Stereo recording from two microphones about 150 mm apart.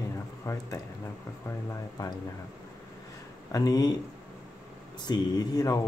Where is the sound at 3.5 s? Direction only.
25° left (ahead or behind).